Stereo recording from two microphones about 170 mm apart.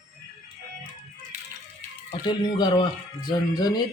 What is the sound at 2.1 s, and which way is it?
Speech, 25° left (ahead or behind).